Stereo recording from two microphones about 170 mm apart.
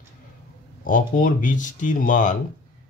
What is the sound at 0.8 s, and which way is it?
Speech, 55° left (ahead or behind).